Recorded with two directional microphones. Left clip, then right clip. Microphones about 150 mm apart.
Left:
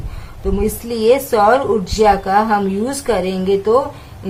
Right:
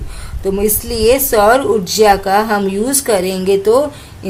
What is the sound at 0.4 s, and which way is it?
A woman's voice, 45° right (ahead or behind).